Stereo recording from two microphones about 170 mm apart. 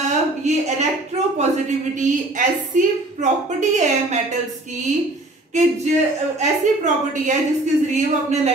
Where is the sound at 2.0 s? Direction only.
50° right (ahead or behind).